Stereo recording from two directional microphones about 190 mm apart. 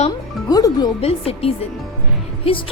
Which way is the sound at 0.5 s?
20° left (ahead or behind).